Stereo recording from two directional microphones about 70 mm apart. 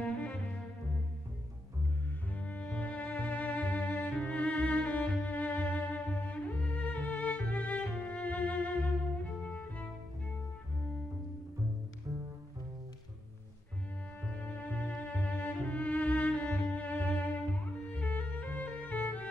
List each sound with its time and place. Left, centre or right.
0.1 s music: centre
2.3 s music: left
14.2 s music: centre